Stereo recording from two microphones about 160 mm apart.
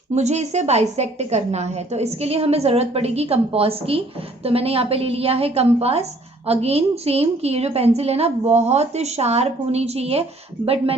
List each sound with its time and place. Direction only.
0.1 s a woman's voice: 45° right (ahead or behind)